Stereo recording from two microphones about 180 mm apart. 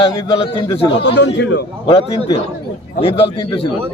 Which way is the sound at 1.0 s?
80° left.